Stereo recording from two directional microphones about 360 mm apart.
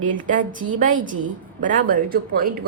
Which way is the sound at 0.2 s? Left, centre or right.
Right.